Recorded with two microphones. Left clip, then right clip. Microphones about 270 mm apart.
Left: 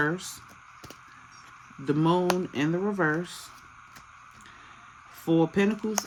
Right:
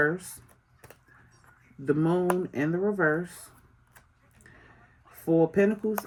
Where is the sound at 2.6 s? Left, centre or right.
Left.